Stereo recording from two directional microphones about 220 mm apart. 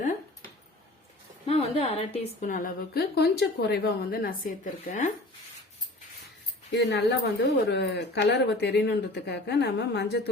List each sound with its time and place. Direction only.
1.5 s a woman's voice: 25° left (ahead or behind)
6.7 s speech: 50° left (ahead or behind)